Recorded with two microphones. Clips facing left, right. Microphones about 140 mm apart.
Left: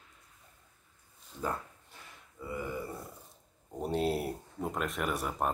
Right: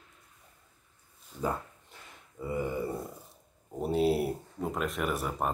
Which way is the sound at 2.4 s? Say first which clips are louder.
Right 5 dB; 25° right (ahead or behind).